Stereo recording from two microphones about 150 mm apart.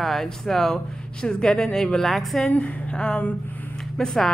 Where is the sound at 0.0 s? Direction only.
Centre (ahead or behind).